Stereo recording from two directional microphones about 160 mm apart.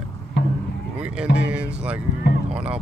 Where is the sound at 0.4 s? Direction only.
90° left.